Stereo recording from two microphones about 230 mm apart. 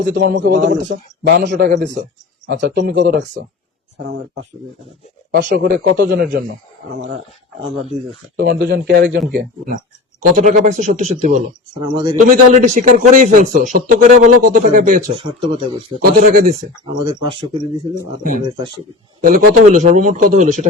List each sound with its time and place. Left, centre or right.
0.1 s a man's voice: right
5.3 s speech: right
8.4 s a man's voice: right
11.7 s speech: centre
12.1 s a man's voice: right
15.1 s speech: right
16.0 s a man's voice: right
17.1 s speech: centre
18.2 s a man's voice: right